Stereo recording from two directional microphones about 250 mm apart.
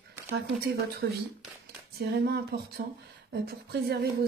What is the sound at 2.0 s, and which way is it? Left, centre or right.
Speech, right.